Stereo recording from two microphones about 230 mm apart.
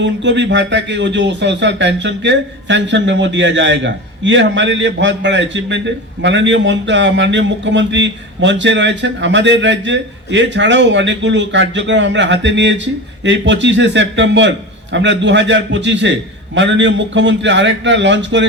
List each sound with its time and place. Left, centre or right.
0.0 s speech: right